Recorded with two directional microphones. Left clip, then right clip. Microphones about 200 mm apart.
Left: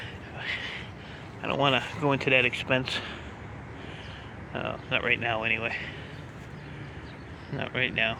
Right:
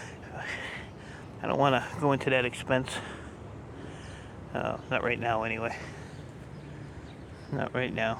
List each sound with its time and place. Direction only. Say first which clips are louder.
0.3 s a sound: left 3 dB; 20° right (ahead or behind)
1.4 s speech: even; 15° right (ahead or behind)
4.5 s speech: left 1 dB; 20° right (ahead or behind)
7.5 s speech: left 3 dB; 30° right (ahead or behind)